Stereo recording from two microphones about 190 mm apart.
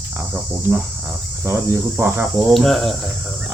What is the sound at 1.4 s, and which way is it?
Speech, 15° right (ahead or behind).